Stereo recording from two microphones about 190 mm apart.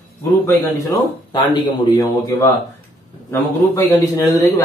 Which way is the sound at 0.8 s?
20° left (ahead or behind).